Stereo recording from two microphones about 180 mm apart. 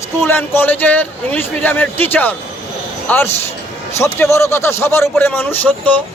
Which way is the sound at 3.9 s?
15° left (ahead or behind).